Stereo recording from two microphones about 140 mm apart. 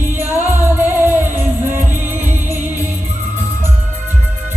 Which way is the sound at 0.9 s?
15° right (ahead or behind).